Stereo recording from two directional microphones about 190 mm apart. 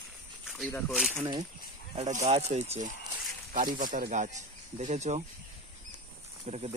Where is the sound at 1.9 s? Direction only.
35° right (ahead or behind).